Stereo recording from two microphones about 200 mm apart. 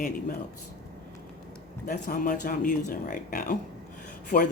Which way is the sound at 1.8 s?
40° left (ahead or behind).